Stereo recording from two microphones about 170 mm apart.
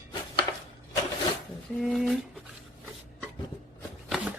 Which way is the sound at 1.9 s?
Centre (ahead or behind).